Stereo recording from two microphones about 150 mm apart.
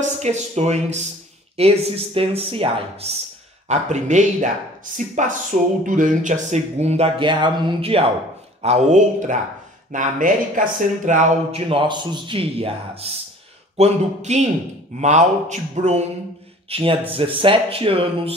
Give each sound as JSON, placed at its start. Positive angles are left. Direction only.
{"t": 0.0, "sound": "speech", "side_deg": -50}
{"t": 8.6, "sound": "speech", "side_deg": -50}
{"t": 11.7, "sound": "speech", "side_deg": -30}